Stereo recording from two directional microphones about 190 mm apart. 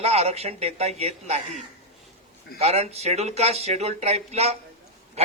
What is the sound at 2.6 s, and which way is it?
A man's voice, 35° right (ahead or behind).